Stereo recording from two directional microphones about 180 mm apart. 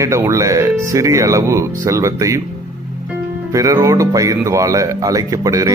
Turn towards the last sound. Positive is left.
turn(degrees=-20)  # may be behind; listen again after turning